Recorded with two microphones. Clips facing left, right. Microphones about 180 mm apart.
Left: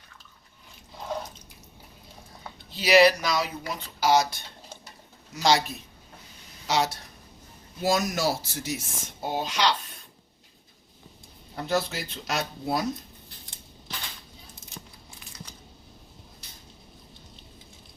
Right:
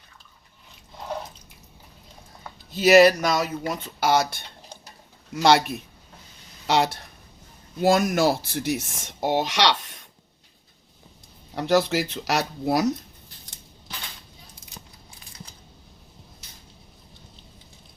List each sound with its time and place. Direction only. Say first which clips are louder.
2.7 s speech: right 4 dB; 45° right (ahead or behind); by 10.0 s 75° right (ahead or behind)
11.5 s speech: right 7 dB; 80° right